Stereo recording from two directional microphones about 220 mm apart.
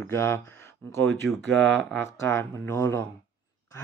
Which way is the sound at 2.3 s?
10° left (ahead or behind).